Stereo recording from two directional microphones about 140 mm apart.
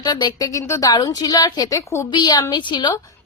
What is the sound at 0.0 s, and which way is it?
A woman's voice, 30° left (ahead or behind).